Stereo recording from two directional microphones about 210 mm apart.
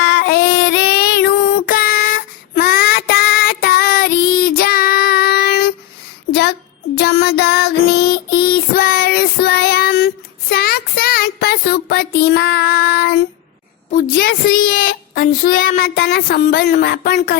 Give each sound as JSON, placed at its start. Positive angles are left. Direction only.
{"t": 0.0, "sound": "child singing", "side_deg": 55}
{"t": 6.9, "sound": "child singing", "side_deg": 50}
{"t": 10.5, "sound": "a sound", "side_deg": 45}
{"t": 14.2, "sound": "speech", "side_deg": 45}